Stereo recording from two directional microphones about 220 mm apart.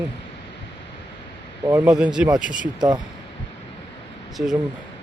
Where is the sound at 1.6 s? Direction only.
10° right (ahead or behind).